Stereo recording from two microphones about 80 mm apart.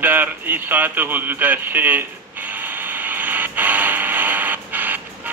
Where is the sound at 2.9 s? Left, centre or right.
Right.